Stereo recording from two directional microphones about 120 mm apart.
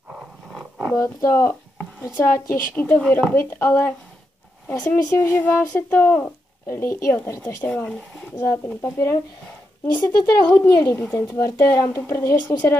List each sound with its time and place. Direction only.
0.9 s a child's voice: 25° left (ahead or behind)
9.9 s speech: 35° left (ahead or behind)
10.6 s a child's voice: 20° left (ahead or behind)